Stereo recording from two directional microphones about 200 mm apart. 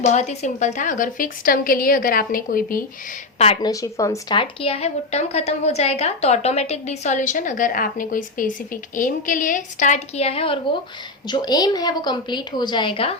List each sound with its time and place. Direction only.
0.0 s a woman's voice: 35° left (ahead or behind)
3.3 s a woman's voice: 30° left (ahead or behind)
3.7 s a woman's voice: 15° left (ahead or behind)